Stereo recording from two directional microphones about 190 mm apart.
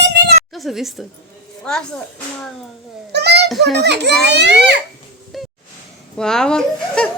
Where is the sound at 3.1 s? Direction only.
60° right (ahead or behind).